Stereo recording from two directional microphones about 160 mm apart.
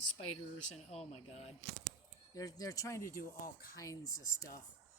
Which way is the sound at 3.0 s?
60° left (ahead or behind).